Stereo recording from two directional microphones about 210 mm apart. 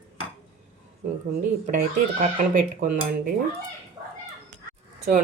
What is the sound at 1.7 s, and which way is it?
Speech, 35° right (ahead or behind).